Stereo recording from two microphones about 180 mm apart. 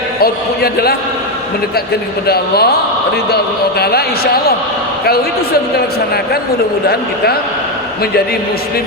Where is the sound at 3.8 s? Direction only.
60° left (ahead or behind).